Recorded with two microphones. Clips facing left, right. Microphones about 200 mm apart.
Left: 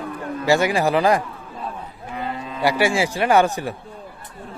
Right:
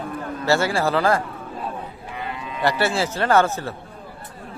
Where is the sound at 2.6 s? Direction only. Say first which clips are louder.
Left 2 dB; 10° left (ahead or behind).